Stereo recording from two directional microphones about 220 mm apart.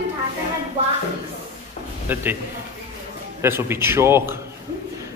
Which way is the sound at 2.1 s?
10° right (ahead or behind).